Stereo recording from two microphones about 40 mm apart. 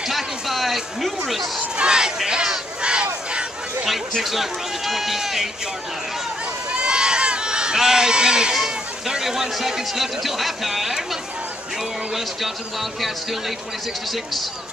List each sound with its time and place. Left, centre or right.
0.0 s a sound: centre
1.0 s speech: centre
1.8 s a sound: right
2.8 s crowd: right
4.2 s speech: centre
6.7 s run: right
8.5 s speech: centre